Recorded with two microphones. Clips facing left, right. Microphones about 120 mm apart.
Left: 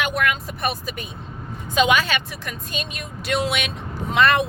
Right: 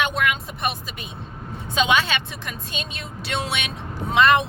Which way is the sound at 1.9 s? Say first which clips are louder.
Left 1 dB; 25° right (ahead or behind).